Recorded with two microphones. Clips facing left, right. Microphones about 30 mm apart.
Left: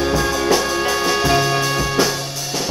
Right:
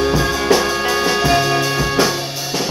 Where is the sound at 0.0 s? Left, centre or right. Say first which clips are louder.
Right 1 dB; centre.